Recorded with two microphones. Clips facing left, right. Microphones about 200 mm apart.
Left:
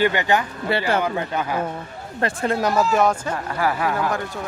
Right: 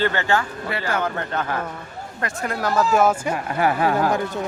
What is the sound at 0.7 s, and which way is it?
Speech, 30° left (ahead or behind).